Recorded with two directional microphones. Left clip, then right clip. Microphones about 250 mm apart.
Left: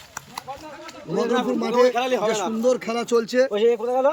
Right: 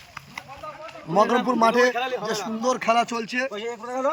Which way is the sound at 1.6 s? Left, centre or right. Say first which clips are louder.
Even; centre.